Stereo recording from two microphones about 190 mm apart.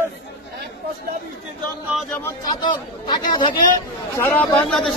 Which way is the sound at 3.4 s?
45° left (ahead or behind).